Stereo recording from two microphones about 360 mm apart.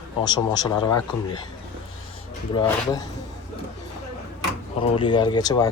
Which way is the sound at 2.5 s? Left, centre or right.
Centre.